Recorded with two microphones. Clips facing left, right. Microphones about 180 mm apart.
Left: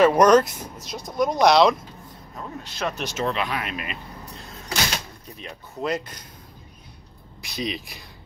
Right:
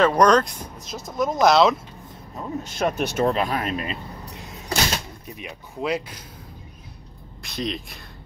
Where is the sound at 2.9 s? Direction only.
55° right (ahead or behind); by 4.0 s 35° right (ahead or behind).